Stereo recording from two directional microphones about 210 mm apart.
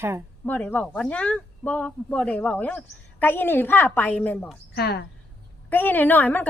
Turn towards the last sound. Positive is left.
turn(degrees=10)  # may be behind; listen again after turning